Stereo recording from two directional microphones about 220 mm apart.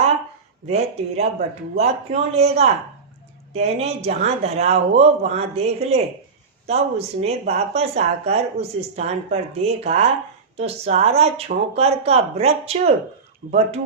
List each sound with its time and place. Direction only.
0.7 s speech: 30° right (ahead or behind)
13.4 s speech: 40° right (ahead or behind)